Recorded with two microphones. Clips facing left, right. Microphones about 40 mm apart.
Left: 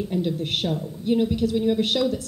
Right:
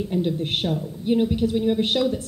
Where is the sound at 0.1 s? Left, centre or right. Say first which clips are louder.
Right 2 dB; centre.